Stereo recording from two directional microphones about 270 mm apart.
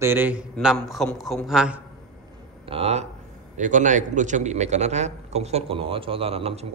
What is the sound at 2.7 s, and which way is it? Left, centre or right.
A man's voice, right.